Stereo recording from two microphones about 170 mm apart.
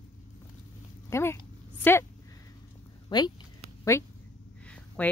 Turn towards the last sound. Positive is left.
turn(degrees=5)  # may be behind; listen again after turning